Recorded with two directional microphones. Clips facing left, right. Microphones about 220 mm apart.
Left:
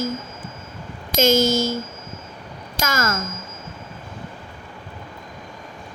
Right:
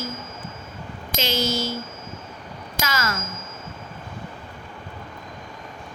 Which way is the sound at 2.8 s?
45° left (ahead or behind).